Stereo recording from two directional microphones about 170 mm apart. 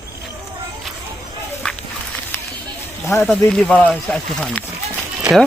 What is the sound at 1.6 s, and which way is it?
Walk, 5° left (ahead or behind).